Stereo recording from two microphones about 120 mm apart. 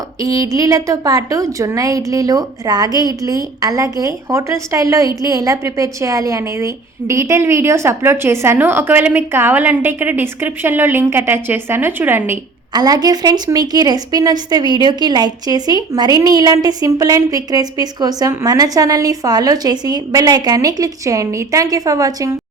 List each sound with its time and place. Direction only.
0.2 s a woman's voice: 30° right (ahead or behind)
12.7 s a woman's voice: 35° right (ahead or behind)